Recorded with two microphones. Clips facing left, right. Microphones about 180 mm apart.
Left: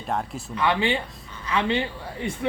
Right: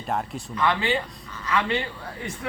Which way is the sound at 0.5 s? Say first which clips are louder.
Left 1 dB; 15° left (ahead or behind).